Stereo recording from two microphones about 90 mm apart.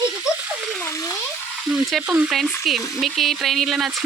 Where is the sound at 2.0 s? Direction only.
15° right (ahead or behind).